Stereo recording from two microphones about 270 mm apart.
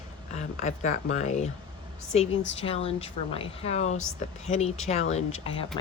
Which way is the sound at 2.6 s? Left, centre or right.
Left.